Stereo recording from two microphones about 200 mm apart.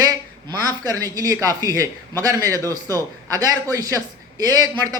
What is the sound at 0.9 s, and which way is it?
A man's voice, 20° right (ahead or behind).